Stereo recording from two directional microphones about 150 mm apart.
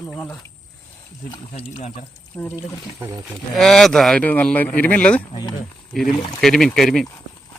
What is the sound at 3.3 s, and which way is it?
Speech, centre (ahead or behind).